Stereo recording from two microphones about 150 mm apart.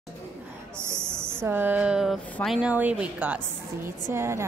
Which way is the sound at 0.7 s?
15° right (ahead or behind).